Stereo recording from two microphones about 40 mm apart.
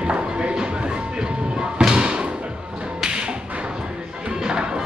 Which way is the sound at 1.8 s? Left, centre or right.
Centre.